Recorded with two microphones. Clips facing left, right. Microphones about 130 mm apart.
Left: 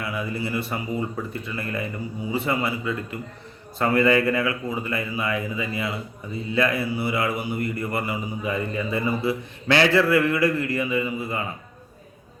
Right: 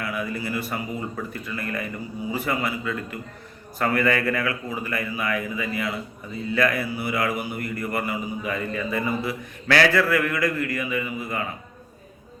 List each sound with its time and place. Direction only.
0.0 s speech: 25° left (ahead or behind)